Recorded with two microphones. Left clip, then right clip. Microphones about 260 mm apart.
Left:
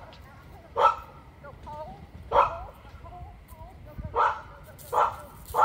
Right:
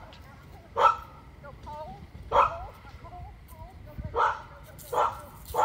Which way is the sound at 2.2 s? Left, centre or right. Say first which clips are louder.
Left 1 dB; left.